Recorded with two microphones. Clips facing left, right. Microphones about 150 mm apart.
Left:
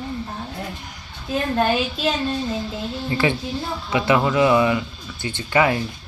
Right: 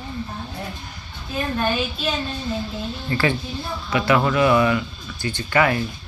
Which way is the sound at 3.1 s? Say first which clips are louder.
Left 1 dB; 20° left (ahead or behind).